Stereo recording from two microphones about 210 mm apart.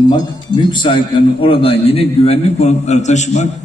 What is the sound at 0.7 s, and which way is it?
A man's voice, 20° left (ahead or behind).